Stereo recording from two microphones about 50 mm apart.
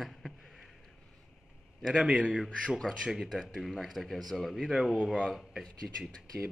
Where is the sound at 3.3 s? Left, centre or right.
Centre.